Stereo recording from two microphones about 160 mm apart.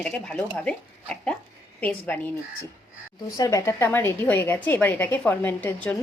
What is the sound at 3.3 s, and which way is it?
A woman's voice, 20° left (ahead or behind).